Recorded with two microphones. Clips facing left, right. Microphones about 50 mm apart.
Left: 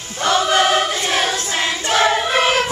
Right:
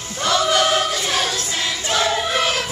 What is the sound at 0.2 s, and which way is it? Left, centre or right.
Choir, left.